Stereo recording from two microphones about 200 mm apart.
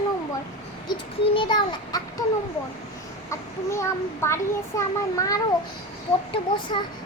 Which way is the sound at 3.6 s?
15° left (ahead or behind).